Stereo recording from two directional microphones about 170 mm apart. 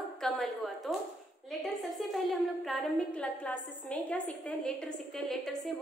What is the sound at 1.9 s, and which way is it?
A woman's voice, centre (ahead or behind).